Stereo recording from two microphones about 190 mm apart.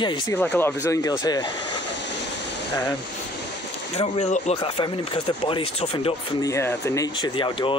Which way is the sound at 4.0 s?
35° left (ahead or behind).